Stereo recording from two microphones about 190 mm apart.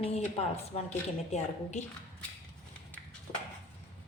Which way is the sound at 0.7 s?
35° left (ahead or behind).